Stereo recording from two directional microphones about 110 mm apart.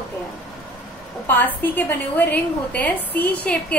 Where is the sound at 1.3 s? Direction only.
15° left (ahead or behind).